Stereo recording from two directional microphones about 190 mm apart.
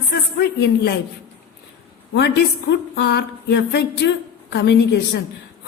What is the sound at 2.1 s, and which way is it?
A woman's voice, 60° left (ahead or behind).